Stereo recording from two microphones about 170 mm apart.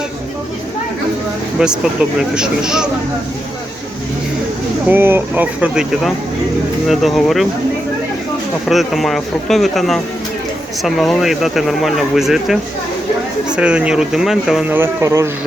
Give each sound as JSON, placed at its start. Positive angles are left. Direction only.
{"t": 1.5, "sound": "speech", "side_deg": -5}
{"t": 4.9, "sound": "speech", "side_deg": -15}
{"t": 8.6, "sound": "speech", "side_deg": 0}
{"t": 13.6, "sound": "speech", "side_deg": -5}
{"t": 14.8, "sound": "speech", "side_deg": -15}